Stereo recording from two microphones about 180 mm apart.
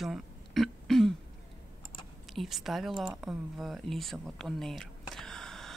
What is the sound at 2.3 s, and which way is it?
Speech, centre (ahead or behind).